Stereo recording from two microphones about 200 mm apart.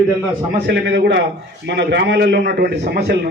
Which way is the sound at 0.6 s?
55° right (ahead or behind).